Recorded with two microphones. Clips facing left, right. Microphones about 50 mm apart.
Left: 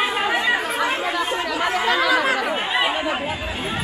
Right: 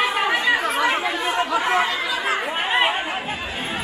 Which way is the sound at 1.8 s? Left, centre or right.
Left.